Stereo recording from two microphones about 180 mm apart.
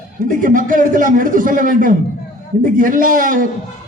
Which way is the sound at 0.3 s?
50° right (ahead or behind).